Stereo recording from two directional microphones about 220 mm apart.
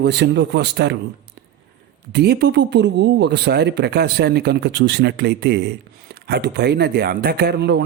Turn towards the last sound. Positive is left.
turn(degrees=-50)  # may be behind; listen again after turning